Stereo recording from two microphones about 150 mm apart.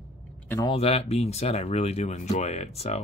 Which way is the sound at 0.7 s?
40° left (ahead or behind).